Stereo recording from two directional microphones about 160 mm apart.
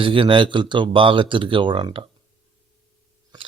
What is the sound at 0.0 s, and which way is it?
Speech, 30° right (ahead or behind).